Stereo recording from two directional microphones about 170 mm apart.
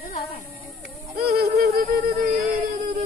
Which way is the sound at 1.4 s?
65° right (ahead or behind).